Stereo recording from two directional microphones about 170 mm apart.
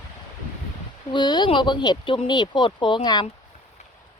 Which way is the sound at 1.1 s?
25° left (ahead or behind).